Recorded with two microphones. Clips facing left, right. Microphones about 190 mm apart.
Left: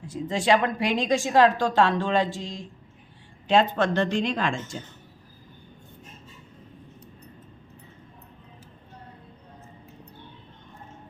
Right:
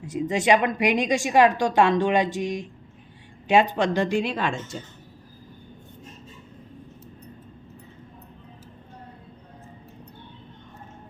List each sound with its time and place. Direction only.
0.1 s speech: 15° right (ahead or behind)